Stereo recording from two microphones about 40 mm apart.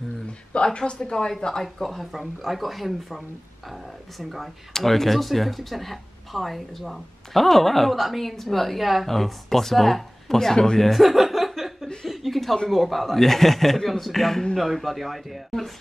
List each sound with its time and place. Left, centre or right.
0.7 s a woman's voice: left
1.4 s speech: centre
10.8 s speech: centre
12.1 s a sound: centre
12.6 s speech: centre